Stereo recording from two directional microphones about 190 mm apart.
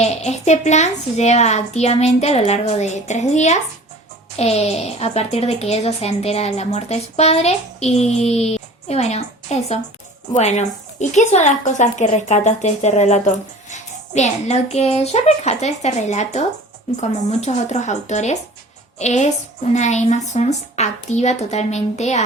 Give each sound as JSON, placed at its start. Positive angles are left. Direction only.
{"t": 0.0, "sound": "speech", "side_deg": 35}